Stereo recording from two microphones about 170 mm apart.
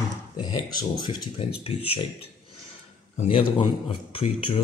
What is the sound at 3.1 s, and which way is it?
Speech, 35° left (ahead or behind).